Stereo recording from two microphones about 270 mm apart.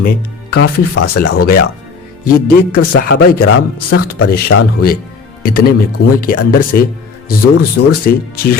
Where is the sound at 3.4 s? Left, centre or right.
Left.